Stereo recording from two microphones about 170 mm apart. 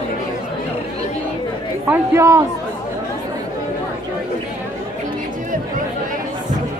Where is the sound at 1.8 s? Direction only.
15° right (ahead or behind).